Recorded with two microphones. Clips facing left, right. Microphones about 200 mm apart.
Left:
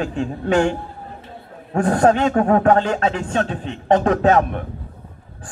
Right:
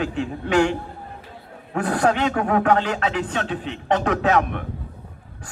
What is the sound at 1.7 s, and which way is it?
A man's voice, 35° left (ahead or behind).